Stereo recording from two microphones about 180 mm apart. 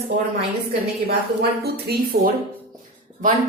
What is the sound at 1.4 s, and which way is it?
Speech, 60° right (ahead or behind).